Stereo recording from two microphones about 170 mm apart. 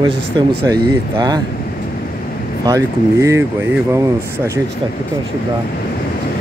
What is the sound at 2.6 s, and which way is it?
Speech, 20° right (ahead or behind).